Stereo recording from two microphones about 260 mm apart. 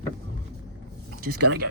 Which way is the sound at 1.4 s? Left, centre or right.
Right.